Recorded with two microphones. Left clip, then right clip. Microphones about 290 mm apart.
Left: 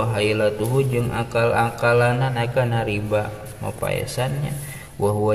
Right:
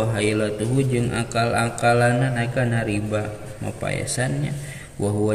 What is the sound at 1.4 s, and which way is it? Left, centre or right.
Speech, left.